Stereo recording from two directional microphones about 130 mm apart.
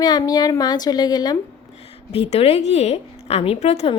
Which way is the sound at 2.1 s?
50° left (ahead or behind).